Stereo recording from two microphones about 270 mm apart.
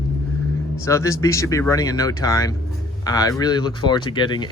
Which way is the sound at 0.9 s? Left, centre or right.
Centre.